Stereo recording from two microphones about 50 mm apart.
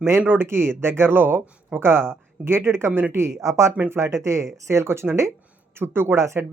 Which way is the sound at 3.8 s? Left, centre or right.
Right.